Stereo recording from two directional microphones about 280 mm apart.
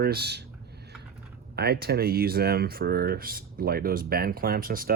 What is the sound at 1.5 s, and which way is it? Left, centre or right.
Speech, right.